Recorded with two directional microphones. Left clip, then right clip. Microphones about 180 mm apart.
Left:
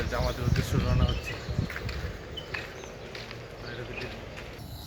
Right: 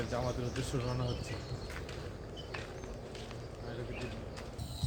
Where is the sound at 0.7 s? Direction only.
25° right (ahead or behind).